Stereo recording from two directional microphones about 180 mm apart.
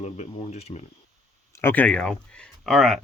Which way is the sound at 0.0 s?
35° left (ahead or behind).